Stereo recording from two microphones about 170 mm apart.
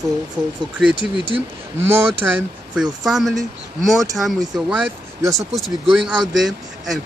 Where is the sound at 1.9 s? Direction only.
15° right (ahead or behind).